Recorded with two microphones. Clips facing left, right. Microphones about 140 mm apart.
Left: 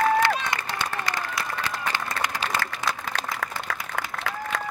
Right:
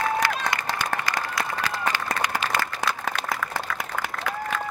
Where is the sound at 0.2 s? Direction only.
25° left (ahead or behind).